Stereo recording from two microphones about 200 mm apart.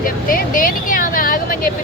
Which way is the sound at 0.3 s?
45° left (ahead or behind).